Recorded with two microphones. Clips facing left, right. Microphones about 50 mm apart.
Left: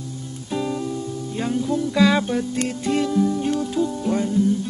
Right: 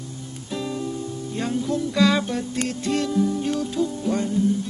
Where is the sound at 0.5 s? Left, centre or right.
Centre.